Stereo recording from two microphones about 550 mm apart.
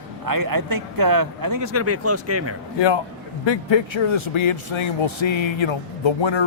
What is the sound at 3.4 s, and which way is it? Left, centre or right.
A man's voice, left.